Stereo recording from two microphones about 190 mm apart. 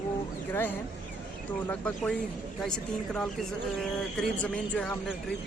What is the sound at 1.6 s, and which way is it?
Speech, 5° left (ahead or behind).